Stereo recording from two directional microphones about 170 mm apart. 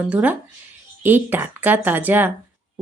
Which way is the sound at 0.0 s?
10° right (ahead or behind).